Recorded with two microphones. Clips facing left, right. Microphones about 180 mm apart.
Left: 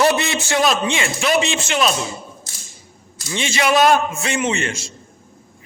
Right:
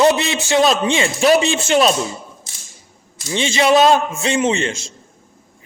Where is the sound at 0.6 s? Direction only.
35° right (ahead or behind).